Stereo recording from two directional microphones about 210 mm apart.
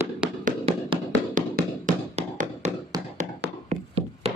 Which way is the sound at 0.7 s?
25° right (ahead or behind).